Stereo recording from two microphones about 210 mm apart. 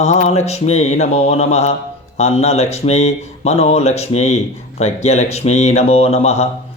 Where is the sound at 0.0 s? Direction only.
30° left (ahead or behind).